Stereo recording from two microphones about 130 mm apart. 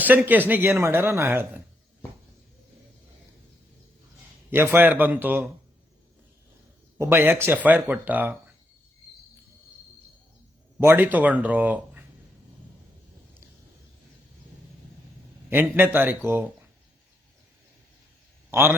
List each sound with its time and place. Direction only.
0.3 s speech: 15° right (ahead or behind)
4.5 s speech: 15° right (ahead or behind)
7.0 s speech: 15° right (ahead or behind)
10.8 s speech: 15° right (ahead or behind)
15.4 s speech: 15° right (ahead or behind)
18.5 s speech: 20° right (ahead or behind)